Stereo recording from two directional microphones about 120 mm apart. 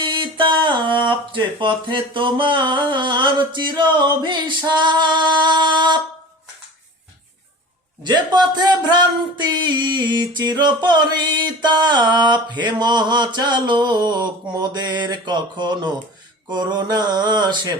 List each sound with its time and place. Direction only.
0.3 s speech: 40° right (ahead or behind)
2.9 s music: 40° right (ahead or behind)
8.0 s music: 35° right (ahead or behind)